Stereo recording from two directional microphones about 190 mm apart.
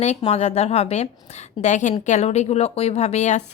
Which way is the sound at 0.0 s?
35° left (ahead or behind).